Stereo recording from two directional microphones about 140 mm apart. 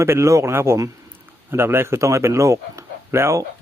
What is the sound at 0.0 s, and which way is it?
A man's voice, 20° right (ahead or behind).